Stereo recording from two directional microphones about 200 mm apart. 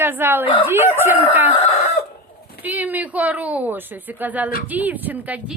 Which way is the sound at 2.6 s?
10° right (ahead or behind).